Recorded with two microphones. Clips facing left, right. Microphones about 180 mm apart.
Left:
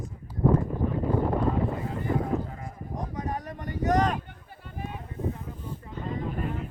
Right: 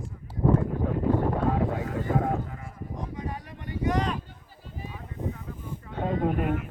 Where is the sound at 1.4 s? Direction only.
85° right.